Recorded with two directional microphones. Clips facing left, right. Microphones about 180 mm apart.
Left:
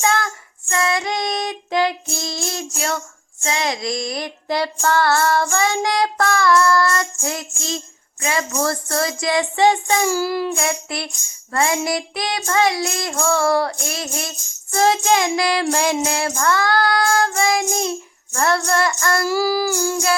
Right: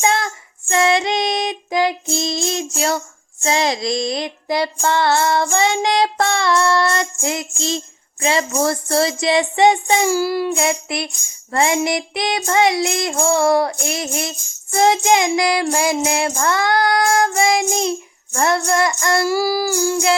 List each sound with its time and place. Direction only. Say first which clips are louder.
0.0 s child singing: right 1 dB; 20° right (ahead or behind)
3.4 s child singing: right 4 dB; 30° right (ahead or behind)
4.4 s child singing: right 1 dB; 15° right (ahead or behind)
10.6 s child singing: right 3 dB; 15° right (ahead or behind)